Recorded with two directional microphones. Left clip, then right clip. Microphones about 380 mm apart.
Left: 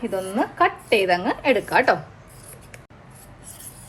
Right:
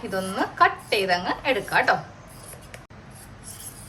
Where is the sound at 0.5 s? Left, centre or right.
Centre.